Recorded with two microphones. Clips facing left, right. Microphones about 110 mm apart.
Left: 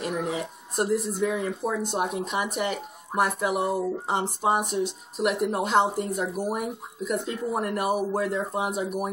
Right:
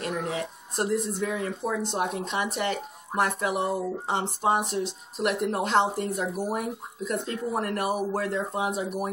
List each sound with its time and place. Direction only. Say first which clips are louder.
0.0 s speech: left 1 dB; 5° left (ahead or behind)